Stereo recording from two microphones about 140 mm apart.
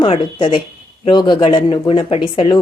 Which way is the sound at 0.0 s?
35° left (ahead or behind).